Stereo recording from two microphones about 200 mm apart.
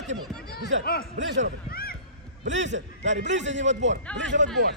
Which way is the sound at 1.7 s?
45° left (ahead or behind).